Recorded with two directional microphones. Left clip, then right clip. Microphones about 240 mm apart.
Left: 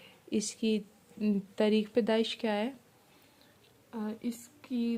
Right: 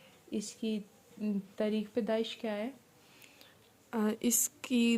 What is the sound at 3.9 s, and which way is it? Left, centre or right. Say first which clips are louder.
Speech: right 7 dB; right.